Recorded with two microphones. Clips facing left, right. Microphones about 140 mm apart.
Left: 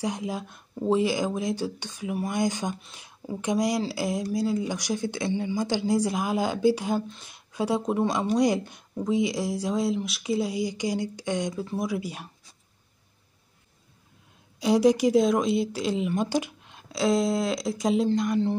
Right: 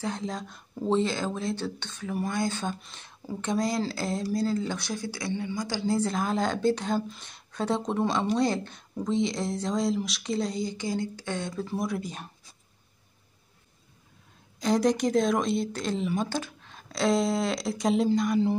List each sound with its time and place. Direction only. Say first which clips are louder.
0.0 s speech: left 2 dB; 10° left (ahead or behind)
2.8 s speech: left 2 dB; 5° left (ahead or behind)
11.6 s speech: left 1 dB; 5° left (ahead or behind)
14.6 s speech: left 4 dB; 5° left (ahead or behind)